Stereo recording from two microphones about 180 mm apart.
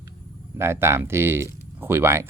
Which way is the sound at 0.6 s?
15° right (ahead or behind).